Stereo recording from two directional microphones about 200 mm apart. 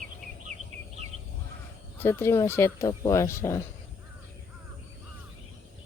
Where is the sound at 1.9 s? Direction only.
10° left (ahead or behind).